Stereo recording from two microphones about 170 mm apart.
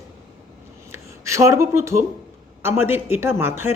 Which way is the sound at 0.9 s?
15° right (ahead or behind).